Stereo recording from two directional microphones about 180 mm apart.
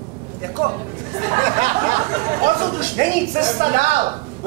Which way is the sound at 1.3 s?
40° right (ahead or behind).